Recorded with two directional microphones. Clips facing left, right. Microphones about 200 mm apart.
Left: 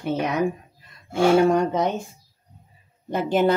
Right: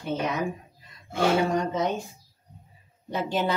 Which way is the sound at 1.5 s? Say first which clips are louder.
Left 6 dB; 60° left (ahead or behind).